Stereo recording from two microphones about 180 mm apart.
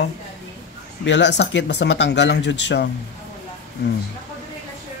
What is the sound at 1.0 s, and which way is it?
Speech, 75° left (ahead or behind).